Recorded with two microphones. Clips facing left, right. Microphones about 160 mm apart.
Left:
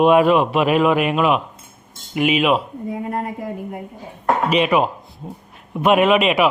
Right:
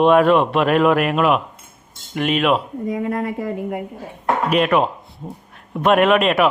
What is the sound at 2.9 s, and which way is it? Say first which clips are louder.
Speech: right 4 dB; 90° right.